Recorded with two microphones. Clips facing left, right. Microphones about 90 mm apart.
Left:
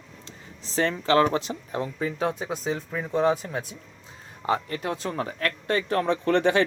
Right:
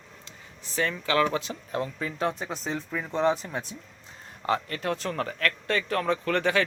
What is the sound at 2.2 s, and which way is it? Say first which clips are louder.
Speech: even; 15° left (ahead or behind).